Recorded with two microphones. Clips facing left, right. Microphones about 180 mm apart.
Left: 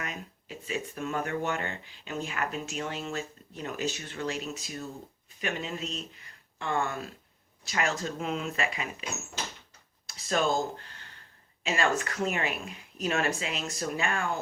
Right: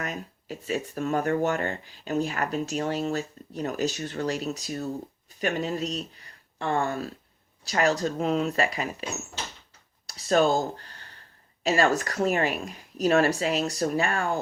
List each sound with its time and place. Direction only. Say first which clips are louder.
0.0 s speech: right 5 dB; 40° right (ahead or behind)
10.1 s speech: right 6 dB; 35° right (ahead or behind)
11.6 s speech: right 5 dB; 40° right (ahead or behind)